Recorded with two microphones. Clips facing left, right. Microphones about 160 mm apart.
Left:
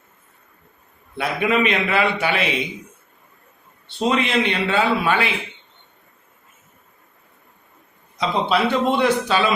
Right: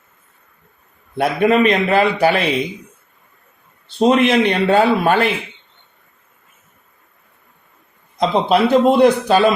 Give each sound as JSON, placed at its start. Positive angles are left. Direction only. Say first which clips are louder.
{"t": 1.1, "sound": "a man's voice", "louder": "right 6 dB", "side_deg": -45}
{"t": 4.0, "sound": "a man's voice", "louder": "right 7 dB", "side_deg": -65}
{"t": 4.4, "sound": "a man's voice", "louder": "right 6 dB", "side_deg": -40}
{"t": 8.2, "sound": "a man's voice", "louder": "right 5 dB", "side_deg": -40}